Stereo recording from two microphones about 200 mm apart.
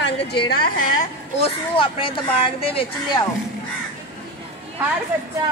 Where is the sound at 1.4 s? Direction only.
25° left (ahead or behind).